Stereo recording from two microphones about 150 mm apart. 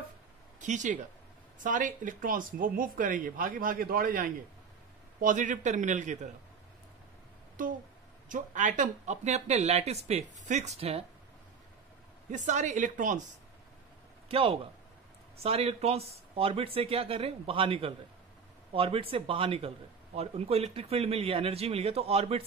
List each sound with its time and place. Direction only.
0.6 s speech: 55° right (ahead or behind)
5.2 s a man's voice: 60° right (ahead or behind)
7.6 s a man's voice: 65° right (ahead or behind); by 11.1 s 40° right (ahead or behind)
12.3 s a man's voice: 55° right (ahead or behind)
14.3 s speech: 40° right (ahead or behind)